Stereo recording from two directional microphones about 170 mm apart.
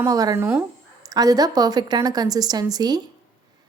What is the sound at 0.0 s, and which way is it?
A woman's voice, 20° right (ahead or behind).